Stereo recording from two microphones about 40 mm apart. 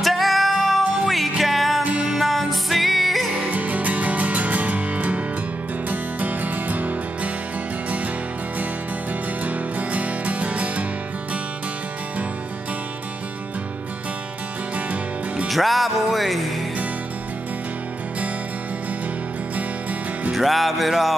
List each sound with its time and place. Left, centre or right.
0.0 s music: centre
1.8 s music: right
2.3 s music: centre
3.4 s music: right
9.4 s music: right
15.4 s music: centre
19.5 s music: right
20.3 s music: centre